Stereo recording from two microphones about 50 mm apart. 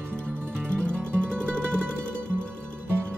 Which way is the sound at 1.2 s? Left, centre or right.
Centre.